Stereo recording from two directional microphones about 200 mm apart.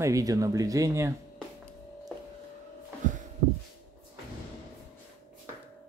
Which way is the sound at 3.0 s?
40° right (ahead or behind).